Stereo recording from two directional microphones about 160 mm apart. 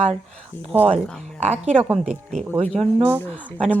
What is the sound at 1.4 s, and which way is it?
Speech, 45° right (ahead or behind).